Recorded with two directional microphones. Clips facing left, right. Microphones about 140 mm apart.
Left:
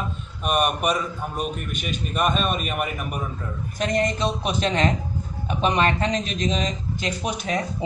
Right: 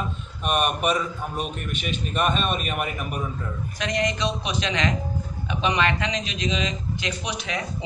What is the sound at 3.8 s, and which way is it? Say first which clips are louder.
A man's voice: left 3 dB; 45° left (ahead or behind).